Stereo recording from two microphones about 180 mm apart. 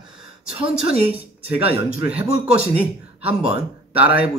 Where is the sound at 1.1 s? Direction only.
10° right (ahead or behind).